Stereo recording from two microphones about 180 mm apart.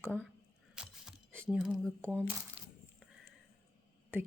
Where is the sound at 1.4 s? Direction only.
Centre (ahead or behind).